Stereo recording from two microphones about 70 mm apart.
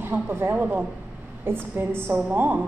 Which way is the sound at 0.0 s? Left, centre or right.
Right.